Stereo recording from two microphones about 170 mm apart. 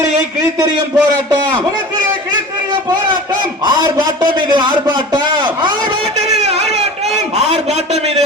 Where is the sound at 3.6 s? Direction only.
25° right (ahead or behind).